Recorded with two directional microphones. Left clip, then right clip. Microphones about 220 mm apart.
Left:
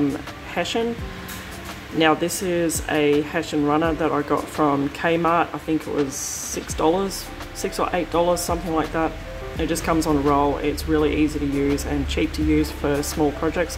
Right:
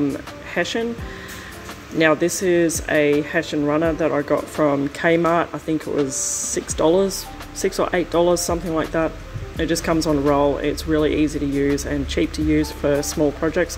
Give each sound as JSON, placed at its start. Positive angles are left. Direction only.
{"t": 0.6, "sound": "speech", "side_deg": -15}
{"t": 2.0, "sound": "speech", "side_deg": -15}